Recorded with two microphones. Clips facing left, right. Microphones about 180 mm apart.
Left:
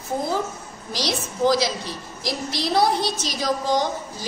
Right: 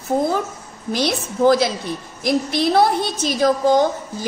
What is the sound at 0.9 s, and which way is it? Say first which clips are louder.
A woman's voice: right 6 dB; 55° right (ahead or behind).